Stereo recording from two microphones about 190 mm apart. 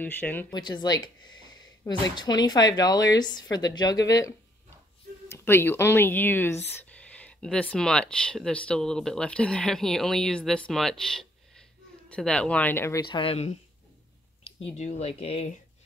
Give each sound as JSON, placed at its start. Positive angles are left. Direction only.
{"t": 0.0, "sound": "speech", "side_deg": 10}
{"t": 0.5, "sound": "speech", "side_deg": 20}
{"t": 13.0, "sound": "speech", "side_deg": 25}
{"t": 14.8, "sound": "speech", "side_deg": 35}